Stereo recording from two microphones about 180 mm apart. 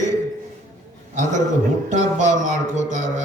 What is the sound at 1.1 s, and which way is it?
Mantra, 45° right (ahead or behind).